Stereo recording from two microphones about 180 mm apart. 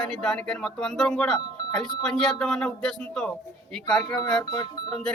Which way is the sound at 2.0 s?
5° left (ahead or behind).